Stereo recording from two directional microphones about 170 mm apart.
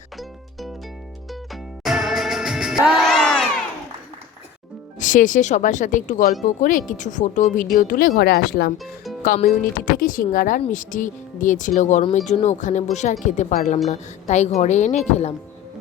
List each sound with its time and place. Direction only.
1.3 s music: centre (ahead or behind)
4.9 s speech: 50° left (ahead or behind); by 8.7 s 65° left (ahead or behind)
9.2 s speech: 50° left (ahead or behind)